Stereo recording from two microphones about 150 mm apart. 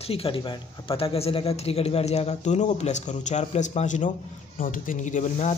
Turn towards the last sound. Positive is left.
turn(degrees=55)  # may be behind; listen again after turning